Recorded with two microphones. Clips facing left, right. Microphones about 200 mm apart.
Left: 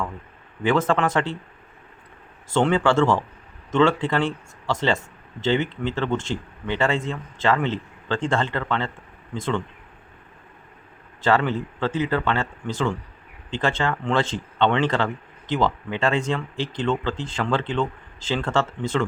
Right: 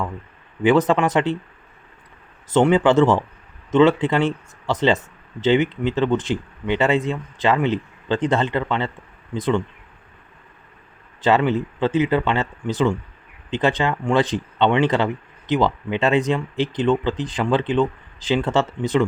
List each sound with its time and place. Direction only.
0.6 s speech: 15° right (ahead or behind)
2.5 s speech: 20° right (ahead or behind)
11.2 s speech: 20° right (ahead or behind)